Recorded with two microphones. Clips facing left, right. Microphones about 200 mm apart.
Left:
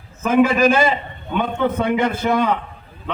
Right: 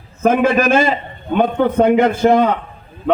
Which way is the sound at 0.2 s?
50° right (ahead or behind).